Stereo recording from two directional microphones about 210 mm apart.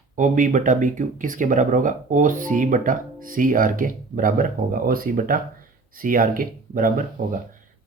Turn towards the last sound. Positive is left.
turn(degrees=-40)  # may be behind; listen again after turning